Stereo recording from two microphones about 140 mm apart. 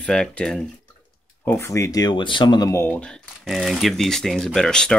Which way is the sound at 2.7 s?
15° left (ahead or behind).